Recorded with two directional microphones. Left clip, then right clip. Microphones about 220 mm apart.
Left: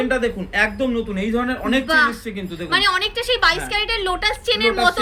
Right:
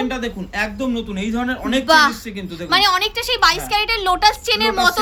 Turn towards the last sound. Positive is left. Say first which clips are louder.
# right 1 dB
turn(degrees=-50)  # may be behind; listen again after turning